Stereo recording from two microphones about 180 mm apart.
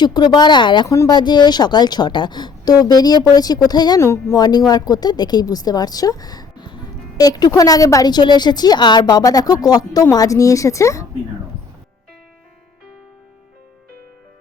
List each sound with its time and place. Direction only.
0.0 s speech: 25° left (ahead or behind)